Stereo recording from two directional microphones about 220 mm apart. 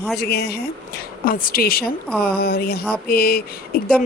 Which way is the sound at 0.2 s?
45° left (ahead or behind).